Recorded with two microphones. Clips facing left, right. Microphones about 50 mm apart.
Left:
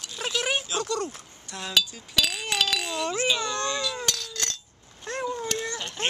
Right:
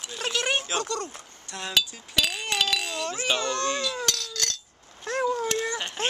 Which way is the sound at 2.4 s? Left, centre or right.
Centre.